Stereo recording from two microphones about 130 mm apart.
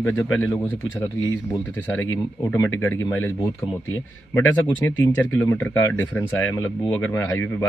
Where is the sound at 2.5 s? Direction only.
20° left (ahead or behind).